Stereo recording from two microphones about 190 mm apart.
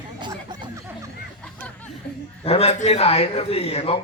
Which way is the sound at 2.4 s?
30° left (ahead or behind).